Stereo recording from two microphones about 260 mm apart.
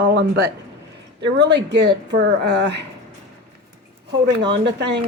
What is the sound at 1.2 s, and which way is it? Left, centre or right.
Speech, right.